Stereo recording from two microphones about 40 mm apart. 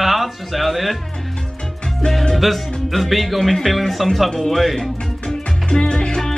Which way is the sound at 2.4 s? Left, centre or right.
Centre.